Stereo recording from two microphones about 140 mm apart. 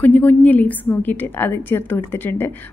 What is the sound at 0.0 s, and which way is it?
A woman's voice, 15° left (ahead or behind).